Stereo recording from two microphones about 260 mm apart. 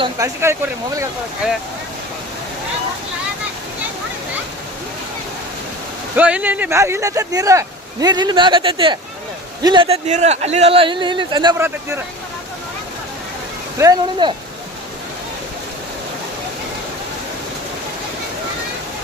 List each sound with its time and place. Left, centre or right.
0.0 s speech: centre
6.1 s speech: centre
13.7 s speech: centre